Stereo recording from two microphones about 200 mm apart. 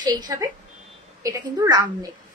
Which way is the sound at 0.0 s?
20° right (ahead or behind).